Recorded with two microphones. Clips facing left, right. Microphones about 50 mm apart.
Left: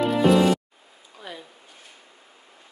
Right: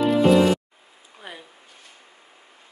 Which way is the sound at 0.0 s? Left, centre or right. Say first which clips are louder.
Right 2 dB; centre.